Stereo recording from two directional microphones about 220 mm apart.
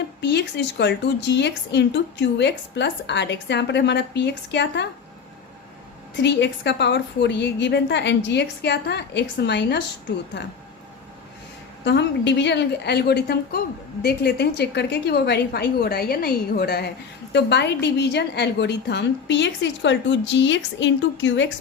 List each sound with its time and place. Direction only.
0.2 s a woman's voice: 50° left (ahead or behind)
6.1 s a woman's voice: 55° left (ahead or behind)
11.9 s a woman's voice: 50° left (ahead or behind)